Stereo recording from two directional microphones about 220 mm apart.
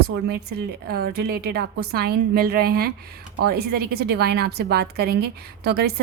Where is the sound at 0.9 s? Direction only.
45° right (ahead or behind).